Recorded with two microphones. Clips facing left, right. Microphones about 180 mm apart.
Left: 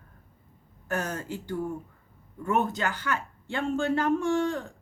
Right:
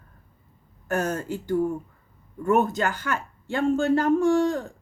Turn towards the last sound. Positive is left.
turn(degrees=-40)  # may be behind; listen again after turning